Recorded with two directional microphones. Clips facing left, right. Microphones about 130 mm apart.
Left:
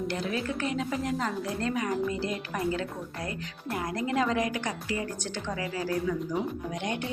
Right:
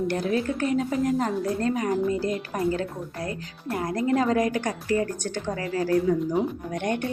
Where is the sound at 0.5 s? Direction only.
45° right (ahead or behind).